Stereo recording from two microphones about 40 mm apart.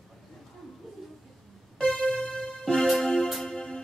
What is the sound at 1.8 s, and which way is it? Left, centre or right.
Music, left.